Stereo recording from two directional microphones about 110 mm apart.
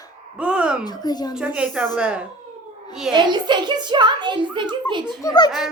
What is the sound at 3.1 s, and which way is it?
A child's voice, 45° right (ahead or behind).